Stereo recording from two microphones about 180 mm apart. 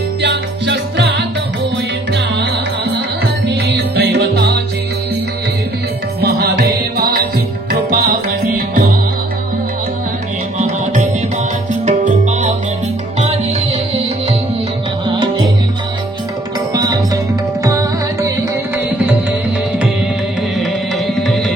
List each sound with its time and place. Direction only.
0.2 s music: 75° right (ahead or behind)
3.4 s music: 65° right (ahead or behind)
6.2 s music: 65° right (ahead or behind)
7.9 s music: 50° right (ahead or behind)
11.8 s music: 40° right (ahead or behind)
16.7 s music: 20° right (ahead or behind)
21.1 s music: centre (ahead or behind)